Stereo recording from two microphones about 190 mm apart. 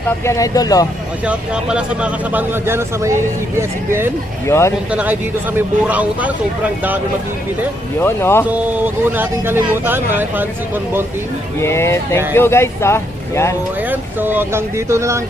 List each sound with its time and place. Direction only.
0.3 s speech: 15° left (ahead or behind)
1.2 s speech: 5° right (ahead or behind)
4.4 s speech: 15° left (ahead or behind)
4.9 s speech: 5° right (ahead or behind)
8.0 s speech: 10° left (ahead or behind)
8.4 s speech: 10° right (ahead or behind)
11.6 s speech: 15° left (ahead or behind)
13.9 s speech: 10° right (ahead or behind)